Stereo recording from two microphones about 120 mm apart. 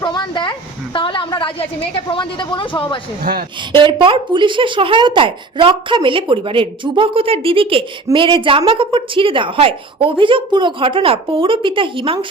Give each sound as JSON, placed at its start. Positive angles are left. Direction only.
{"t": 0.0, "sound": "a sound", "side_deg": 40}
{"t": 0.9, "sound": "a woman's voice", "side_deg": 45}
{"t": 3.7, "sound": "speech", "side_deg": -45}